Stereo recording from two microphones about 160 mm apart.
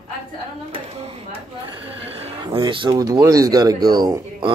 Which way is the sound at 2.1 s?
35° right (ahead or behind).